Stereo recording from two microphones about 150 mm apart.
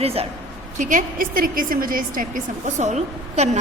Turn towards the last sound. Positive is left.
turn(degrees=-50)  # may be behind; listen again after turning